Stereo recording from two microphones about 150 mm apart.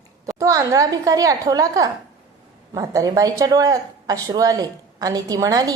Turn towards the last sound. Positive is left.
turn(degrees=-25)  # may be behind; listen again after turning